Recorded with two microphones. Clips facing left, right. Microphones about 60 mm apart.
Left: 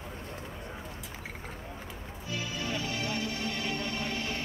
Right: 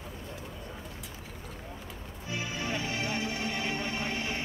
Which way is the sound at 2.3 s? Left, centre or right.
Right.